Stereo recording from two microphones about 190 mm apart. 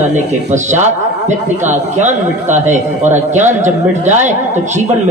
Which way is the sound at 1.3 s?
40° right (ahead or behind).